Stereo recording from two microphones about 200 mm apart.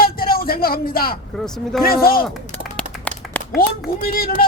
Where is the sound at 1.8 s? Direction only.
50° left (ahead or behind).